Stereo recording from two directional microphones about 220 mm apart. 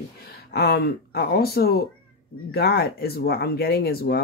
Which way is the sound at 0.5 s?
45° left (ahead or behind).